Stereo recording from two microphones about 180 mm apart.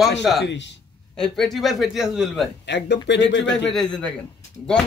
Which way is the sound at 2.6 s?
70° left (ahead or behind).